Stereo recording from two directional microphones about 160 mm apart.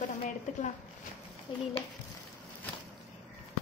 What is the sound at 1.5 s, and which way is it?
Speech, 30° left (ahead or behind).